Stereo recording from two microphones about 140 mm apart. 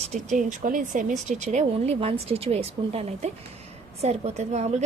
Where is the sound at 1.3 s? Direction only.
55° right (ahead or behind).